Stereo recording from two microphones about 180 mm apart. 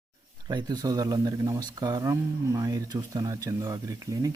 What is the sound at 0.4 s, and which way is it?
Speech, 20° right (ahead or behind).